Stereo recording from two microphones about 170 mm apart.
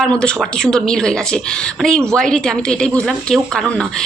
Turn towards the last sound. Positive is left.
turn(degrees=5)  # may be behind; listen again after turning